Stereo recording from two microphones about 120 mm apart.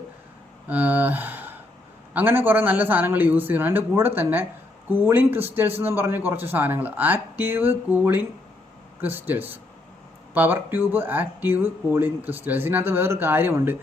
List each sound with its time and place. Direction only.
0.7 s speech: 15° right (ahead or behind)